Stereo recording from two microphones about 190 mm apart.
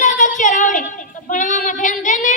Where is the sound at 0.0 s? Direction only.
40° left (ahead or behind).